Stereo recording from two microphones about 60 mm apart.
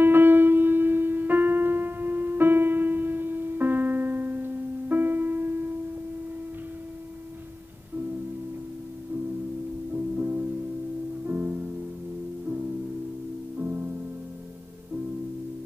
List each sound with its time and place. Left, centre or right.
0.0 s piano: right
9.9 s music: right
13.6 s music: right